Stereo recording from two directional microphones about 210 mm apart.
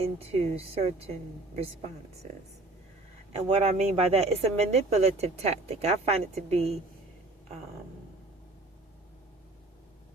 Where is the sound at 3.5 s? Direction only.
30° right (ahead or behind).